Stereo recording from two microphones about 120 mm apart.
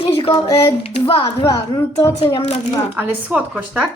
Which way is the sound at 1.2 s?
25° left (ahead or behind).